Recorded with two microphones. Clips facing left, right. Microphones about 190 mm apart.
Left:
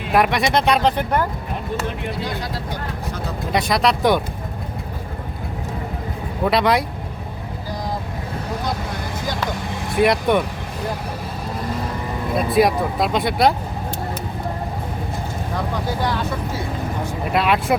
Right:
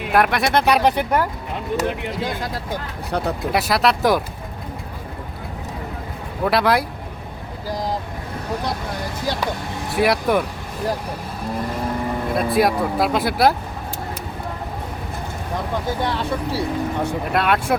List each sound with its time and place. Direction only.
0.1 s speech: centre (ahead or behind)
3.5 s speech: 5° right (ahead or behind)
6.4 s speech: centre (ahead or behind)
9.9 s speech: centre (ahead or behind)
12.3 s speech: centre (ahead or behind)
16.0 s speech: 35° right (ahead or behind)
17.3 s speech: centre (ahead or behind)